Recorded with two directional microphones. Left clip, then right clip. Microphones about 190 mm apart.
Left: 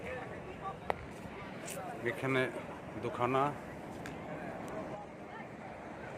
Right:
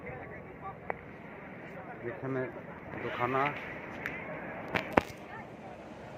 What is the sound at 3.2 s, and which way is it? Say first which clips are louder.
Speech: right 1 dB; 15° left (ahead or behind).